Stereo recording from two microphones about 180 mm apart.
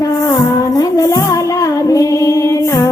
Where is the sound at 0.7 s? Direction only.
20° left (ahead or behind).